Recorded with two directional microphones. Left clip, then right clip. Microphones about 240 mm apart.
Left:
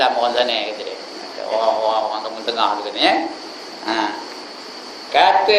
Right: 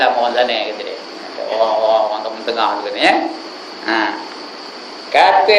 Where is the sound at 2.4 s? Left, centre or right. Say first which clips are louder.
Right 2 dB; centre.